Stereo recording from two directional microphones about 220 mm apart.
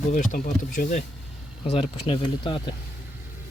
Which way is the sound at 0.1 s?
35° left (ahead or behind).